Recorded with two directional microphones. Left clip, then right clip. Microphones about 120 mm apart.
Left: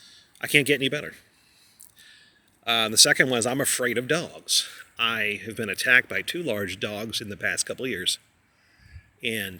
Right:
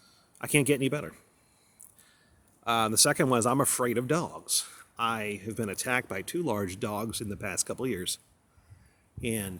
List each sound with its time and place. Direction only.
0.2 s speech: 70° right (ahead or behind)
2.6 s speech: 70° right (ahead or behind)
4.9 s speech: 50° right (ahead or behind); by 8.2 s 70° right (ahead or behind)
9.2 s speech: 65° right (ahead or behind)